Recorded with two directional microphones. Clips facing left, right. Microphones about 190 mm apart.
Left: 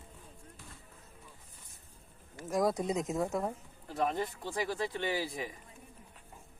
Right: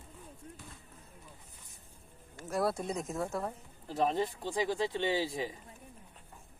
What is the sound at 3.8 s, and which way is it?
Speech, 25° right (ahead or behind).